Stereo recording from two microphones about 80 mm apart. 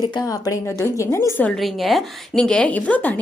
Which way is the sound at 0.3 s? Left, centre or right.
Left.